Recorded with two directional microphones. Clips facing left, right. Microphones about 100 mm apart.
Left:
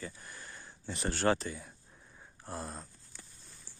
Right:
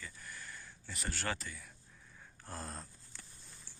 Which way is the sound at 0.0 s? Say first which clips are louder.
Left 4 dB; 25° left (ahead or behind).